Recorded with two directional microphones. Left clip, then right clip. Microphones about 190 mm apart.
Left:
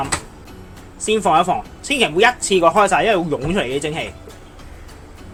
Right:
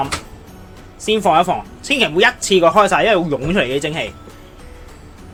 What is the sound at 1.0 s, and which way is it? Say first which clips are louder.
Speech: right 1 dB; 10° right (ahead or behind).